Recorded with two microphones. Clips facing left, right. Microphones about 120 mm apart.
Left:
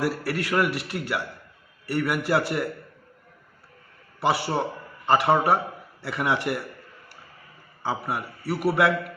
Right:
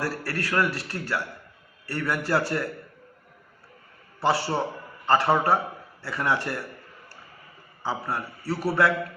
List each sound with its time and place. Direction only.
0.0 s a man's voice: 15° left (ahead or behind)
4.2 s a man's voice: 15° left (ahead or behind)
7.8 s a man's voice: 15° left (ahead or behind)